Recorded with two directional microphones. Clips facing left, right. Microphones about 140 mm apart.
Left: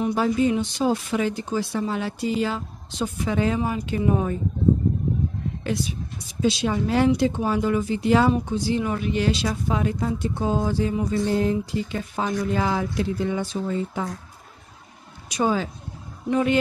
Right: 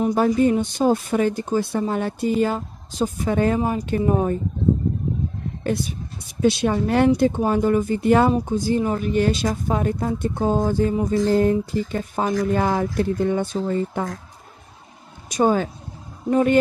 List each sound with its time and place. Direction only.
0.0 s speech: 45° right (ahead or behind)
5.6 s speech: 50° right (ahead or behind)
15.2 s speech: 45° right (ahead or behind)